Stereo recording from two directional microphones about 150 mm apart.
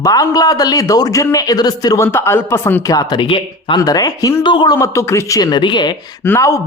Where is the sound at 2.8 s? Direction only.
25° left (ahead or behind).